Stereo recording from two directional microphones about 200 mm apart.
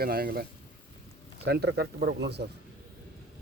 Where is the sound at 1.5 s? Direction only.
55° right (ahead or behind).